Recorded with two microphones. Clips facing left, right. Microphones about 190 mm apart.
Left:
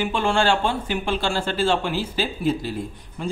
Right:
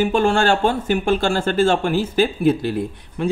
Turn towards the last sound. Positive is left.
turn(degrees=-65)  # may be behind; listen again after turning